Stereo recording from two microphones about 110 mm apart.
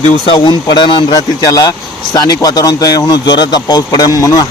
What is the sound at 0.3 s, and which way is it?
Speech, 45° left (ahead or behind).